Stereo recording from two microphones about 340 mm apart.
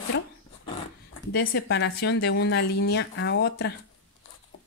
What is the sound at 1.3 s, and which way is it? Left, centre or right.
Speech, left.